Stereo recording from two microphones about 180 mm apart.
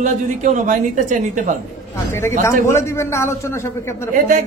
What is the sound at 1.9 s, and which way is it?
A man's voice, 15° left (ahead or behind).